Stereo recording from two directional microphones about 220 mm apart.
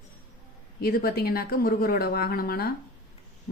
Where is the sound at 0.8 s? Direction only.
45° left (ahead or behind).